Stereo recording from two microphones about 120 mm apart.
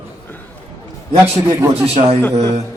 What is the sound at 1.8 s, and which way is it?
Speech, 60° right (ahead or behind).